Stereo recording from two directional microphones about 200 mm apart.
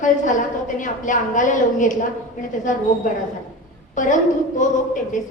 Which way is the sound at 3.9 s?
40° left (ahead or behind).